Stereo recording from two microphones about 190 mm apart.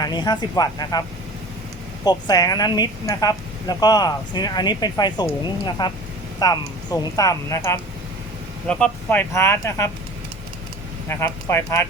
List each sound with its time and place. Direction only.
0.0 s speech: 20° left (ahead or behind)
2.0 s speech: 20° left (ahead or behind)
11.1 s speech: 15° left (ahead or behind)